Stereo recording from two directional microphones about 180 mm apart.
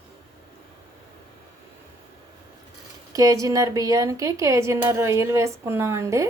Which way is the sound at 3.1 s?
20° right (ahead or behind).